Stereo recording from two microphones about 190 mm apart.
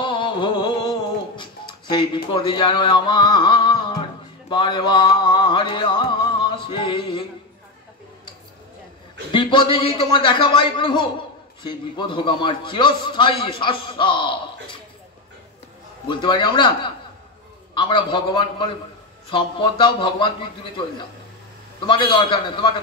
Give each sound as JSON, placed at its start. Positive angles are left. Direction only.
{"t": 0.0, "sound": "music", "side_deg": 25}
{"t": 2.3, "sound": "a man's voice", "side_deg": 25}
{"t": 4.5, "sound": "music", "side_deg": 25}
{"t": 9.3, "sound": "a man's voice", "side_deg": 25}
{"t": 16.1, "sound": "a man's voice", "side_deg": 25}
{"t": 21.7, "sound": "a man's voice", "side_deg": 25}